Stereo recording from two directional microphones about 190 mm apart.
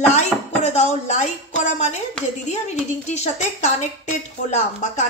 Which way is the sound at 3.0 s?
35° left (ahead or behind).